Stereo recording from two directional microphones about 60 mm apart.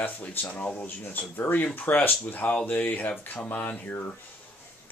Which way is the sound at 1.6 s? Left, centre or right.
Left.